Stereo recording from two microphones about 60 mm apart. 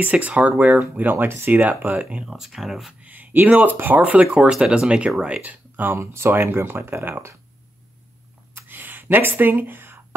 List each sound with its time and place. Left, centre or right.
0.0 s speech: right
0.9 s speech: right
2.2 s speech: centre
2.9 s speech: right
3.7 s speech: right
4.0 s speech: right
4.4 s speech: centre; by 5.9 s right
5.9 s speech: right
8.5 s a sound: right